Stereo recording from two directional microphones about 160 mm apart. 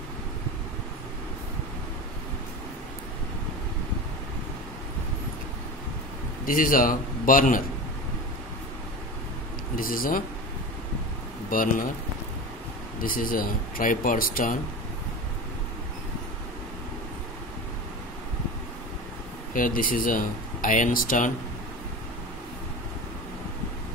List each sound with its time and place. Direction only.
6.4 s speech: 60° left (ahead or behind)
9.8 s speech: 60° left (ahead or behind)
11.5 s speech: 60° left (ahead or behind)
13.0 s speech: 60° left (ahead or behind)
19.5 s speech: 60° left (ahead or behind)